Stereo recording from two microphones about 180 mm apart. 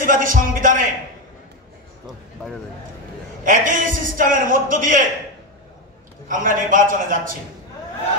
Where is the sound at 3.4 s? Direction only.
45° right (ahead or behind).